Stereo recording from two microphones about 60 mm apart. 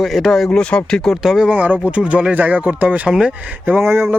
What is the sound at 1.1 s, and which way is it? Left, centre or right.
Speech, centre.